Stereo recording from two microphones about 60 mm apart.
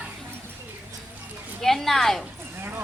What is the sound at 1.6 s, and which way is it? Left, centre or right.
Speech, centre.